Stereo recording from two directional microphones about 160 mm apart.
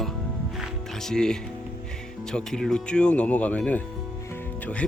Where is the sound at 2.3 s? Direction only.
5° left (ahead or behind).